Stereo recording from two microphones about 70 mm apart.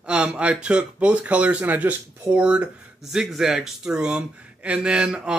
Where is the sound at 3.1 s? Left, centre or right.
Centre.